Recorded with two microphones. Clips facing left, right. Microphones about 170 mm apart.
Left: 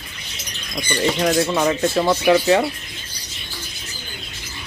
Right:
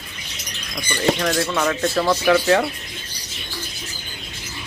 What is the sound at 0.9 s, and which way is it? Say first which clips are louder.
Speech: left 1 dB; 20° left (ahead or behind).